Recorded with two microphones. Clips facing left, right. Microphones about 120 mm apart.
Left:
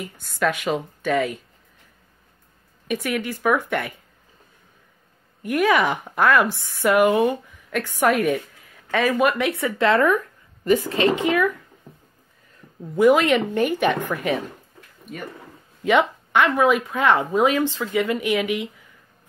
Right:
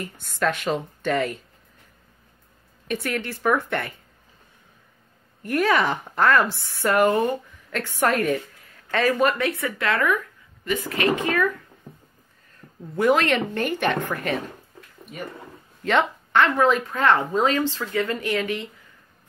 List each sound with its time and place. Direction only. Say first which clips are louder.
0.0 s speech: left 1 dB; 5° left (ahead or behind)
2.9 s speech: left 2 dB; 10° left (ahead or behind)
5.4 s speech: left 2 dB; 15° left (ahead or behind); by 10.8 s 35° left (ahead or behind)
10.9 s speech: left 3 dB; 25° left (ahead or behind)
12.9 s speech: left 4 dB; 10° left (ahead or behind)
15.8 s speech: left 3 dB; 10° left (ahead or behind)